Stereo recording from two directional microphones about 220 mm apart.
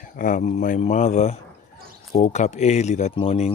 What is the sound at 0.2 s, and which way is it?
Speech, 35° left (ahead or behind).